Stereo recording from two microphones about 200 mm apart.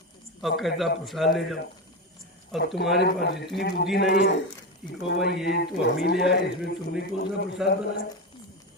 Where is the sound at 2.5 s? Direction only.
60° left (ahead or behind).